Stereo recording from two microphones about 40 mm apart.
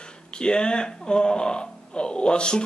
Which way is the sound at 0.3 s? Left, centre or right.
Left.